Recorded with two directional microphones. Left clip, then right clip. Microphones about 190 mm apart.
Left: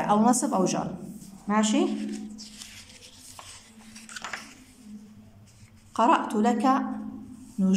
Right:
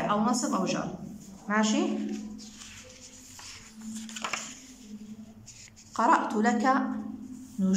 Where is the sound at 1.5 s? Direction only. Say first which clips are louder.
Left 2 dB; 15° left (ahead or behind).